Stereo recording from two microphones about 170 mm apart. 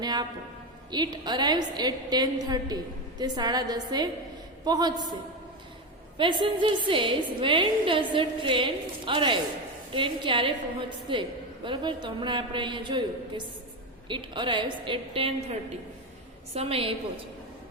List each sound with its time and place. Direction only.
0.0 s a woman's voice: 25° right (ahead or behind)
6.1 s a woman's voice: 30° right (ahead or behind)
16.6 s a woman's voice: 35° right (ahead or behind)